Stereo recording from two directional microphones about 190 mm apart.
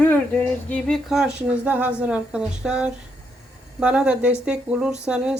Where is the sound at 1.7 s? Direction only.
10° right (ahead or behind).